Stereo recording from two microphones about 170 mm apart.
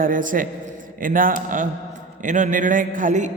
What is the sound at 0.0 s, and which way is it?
A man's voice, 50° right (ahead or behind).